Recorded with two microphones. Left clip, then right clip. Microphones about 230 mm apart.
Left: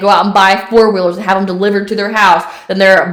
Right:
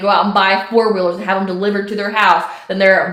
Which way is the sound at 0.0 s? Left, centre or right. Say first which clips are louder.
Left 5 dB; left.